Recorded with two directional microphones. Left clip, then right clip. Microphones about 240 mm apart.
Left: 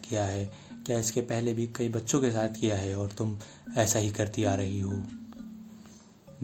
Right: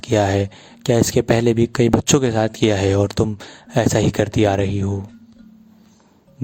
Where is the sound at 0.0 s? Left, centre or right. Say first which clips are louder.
Right 15 dB; right.